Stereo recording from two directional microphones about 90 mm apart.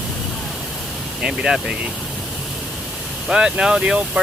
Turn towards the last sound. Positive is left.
turn(degrees=-10)  # may be behind; listen again after turning